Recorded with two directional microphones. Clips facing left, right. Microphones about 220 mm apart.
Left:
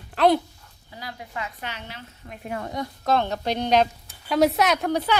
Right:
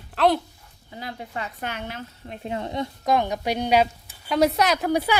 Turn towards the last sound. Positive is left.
turn(degrees=-10)  # may be behind; listen again after turning